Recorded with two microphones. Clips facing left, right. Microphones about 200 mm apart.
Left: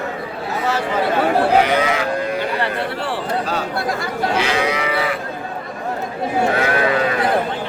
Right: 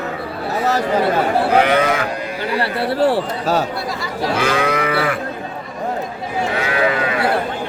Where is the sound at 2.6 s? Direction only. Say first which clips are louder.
Right 5 dB; 40° right (ahead or behind).